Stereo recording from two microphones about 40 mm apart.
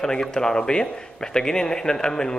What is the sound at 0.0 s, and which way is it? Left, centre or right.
A man's voice, centre.